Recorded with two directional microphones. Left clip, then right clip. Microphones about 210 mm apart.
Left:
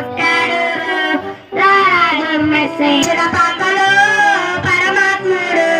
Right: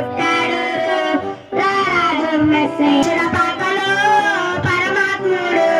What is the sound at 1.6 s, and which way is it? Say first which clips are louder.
Child singing: left 6 dB; 50° right (ahead or behind).